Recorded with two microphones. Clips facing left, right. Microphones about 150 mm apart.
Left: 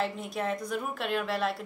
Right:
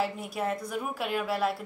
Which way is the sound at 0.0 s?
5° right (ahead or behind).